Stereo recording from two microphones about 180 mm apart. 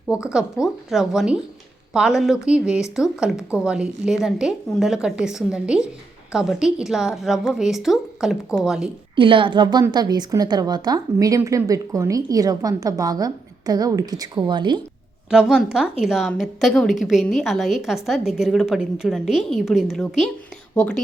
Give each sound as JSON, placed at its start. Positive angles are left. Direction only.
{"t": 0.3, "sound": "a woman's voice", "side_deg": -5}
{"t": 9.1, "sound": "a woman's voice", "side_deg": -30}
{"t": 15.3, "sound": "a woman's voice", "side_deg": -5}